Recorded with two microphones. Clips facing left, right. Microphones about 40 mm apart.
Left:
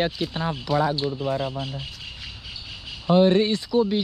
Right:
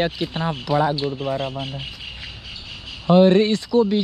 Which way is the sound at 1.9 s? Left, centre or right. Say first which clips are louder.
Right 3 dB; centre.